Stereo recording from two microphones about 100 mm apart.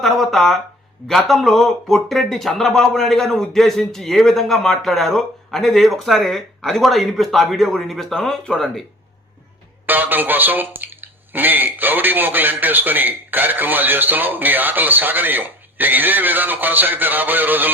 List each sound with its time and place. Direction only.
0.0 s a sound: centre (ahead or behind)
1.0 s speech: centre (ahead or behind)
9.8 s speech: 20° right (ahead or behind)